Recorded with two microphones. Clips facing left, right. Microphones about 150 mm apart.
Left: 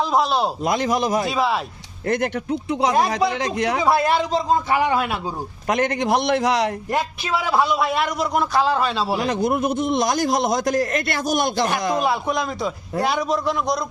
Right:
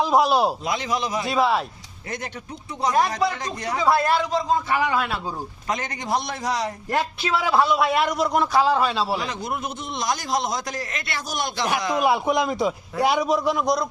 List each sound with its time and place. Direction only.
0.0 s a man's voice: 10° right (ahead or behind)
0.6 s a man's voice: 45° left (ahead or behind)
1.2 s a man's voice: centre (ahead or behind)
2.0 s a man's voice: 55° left (ahead or behind); by 3.8 s 75° left (ahead or behind)
3.8 s a man's voice: 15° left (ahead or behind)
5.6 s a man's voice: 60° left (ahead or behind)
7.3 s a man's voice: 5° left (ahead or behind)
9.1 s a man's voice: 50° left (ahead or behind)
12.0 s a man's voice: 15° right (ahead or behind)